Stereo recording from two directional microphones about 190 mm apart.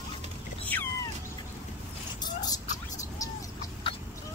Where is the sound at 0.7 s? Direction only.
10° left (ahead or behind).